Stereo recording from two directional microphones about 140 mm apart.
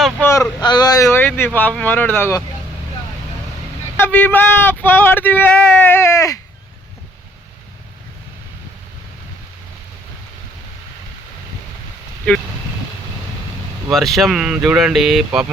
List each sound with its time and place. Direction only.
0.2 s vehicle: 20° left (ahead or behind)
0.6 s speech: 30° left (ahead or behind)
4.0 s speech: 15° left (ahead or behind)
13.9 s speech: centre (ahead or behind)